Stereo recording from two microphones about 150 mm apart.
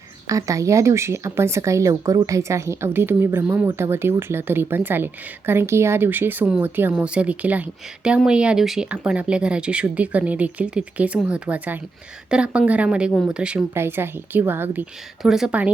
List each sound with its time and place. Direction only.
0.3 s speech: 20° right (ahead or behind)
15.2 s speech: 5° right (ahead or behind)